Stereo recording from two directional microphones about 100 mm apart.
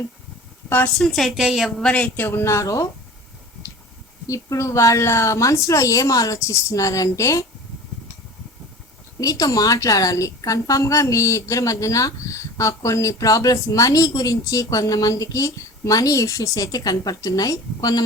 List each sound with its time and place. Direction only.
0.9 s a woman's voice: centre (ahead or behind)
1.9 s speech: 15° left (ahead or behind); by 2.9 s 30° left (ahead or behind)
4.3 s a woman's voice: 30° left (ahead or behind)
9.2 s a woman's voice: 35° left (ahead or behind)